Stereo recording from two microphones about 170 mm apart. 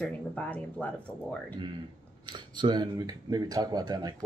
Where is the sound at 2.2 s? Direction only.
25° right (ahead or behind).